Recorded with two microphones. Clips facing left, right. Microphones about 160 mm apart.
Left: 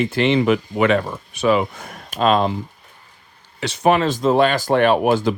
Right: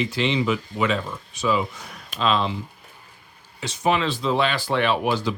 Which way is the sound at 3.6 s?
65° left (ahead or behind).